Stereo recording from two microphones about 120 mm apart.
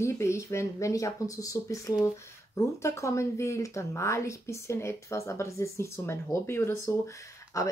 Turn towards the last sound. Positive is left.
turn(degrees=25)  # may be behind; listen again after turning